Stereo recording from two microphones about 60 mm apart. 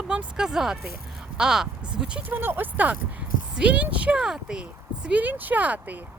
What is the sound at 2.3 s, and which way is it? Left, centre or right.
Speech, right.